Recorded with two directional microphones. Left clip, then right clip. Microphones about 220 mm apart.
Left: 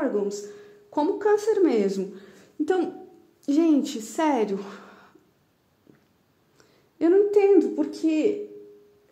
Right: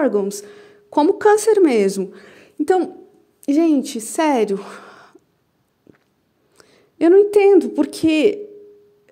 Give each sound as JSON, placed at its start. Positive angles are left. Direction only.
{"t": 0.0, "sound": "a woman's voice", "side_deg": -35}
{"t": 6.6, "sound": "speech", "side_deg": -35}